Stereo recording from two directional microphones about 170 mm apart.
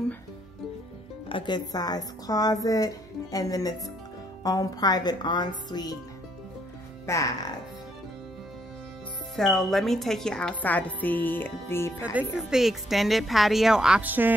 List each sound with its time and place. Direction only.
1.3 s speech: 25° left (ahead or behind)
7.1 s speech: 20° left (ahead or behind)
9.6 s a woman's voice: centre (ahead or behind)
12.0 s speech: 10° right (ahead or behind)